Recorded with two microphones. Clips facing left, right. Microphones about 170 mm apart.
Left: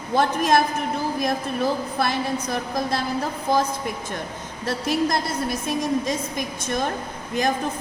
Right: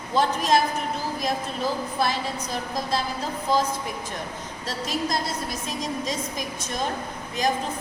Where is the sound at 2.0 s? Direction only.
55° left (ahead or behind).